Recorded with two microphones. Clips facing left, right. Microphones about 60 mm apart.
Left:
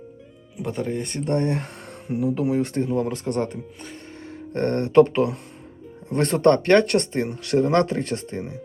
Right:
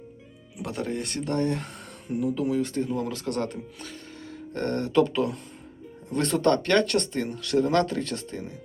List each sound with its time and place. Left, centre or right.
0.6 s speech: centre
1.2 s speech: left
4.5 s speech: left